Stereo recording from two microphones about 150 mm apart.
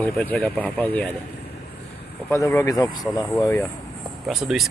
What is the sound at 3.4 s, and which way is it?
Speech, 15° left (ahead or behind).